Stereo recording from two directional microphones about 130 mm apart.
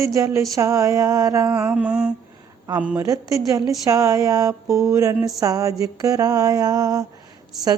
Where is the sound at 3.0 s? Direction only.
25° right (ahead or behind).